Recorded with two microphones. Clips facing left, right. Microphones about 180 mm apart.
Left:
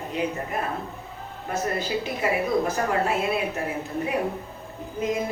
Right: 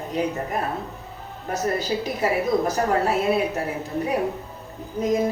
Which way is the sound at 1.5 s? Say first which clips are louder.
Right 2 dB; 40° right (ahead or behind).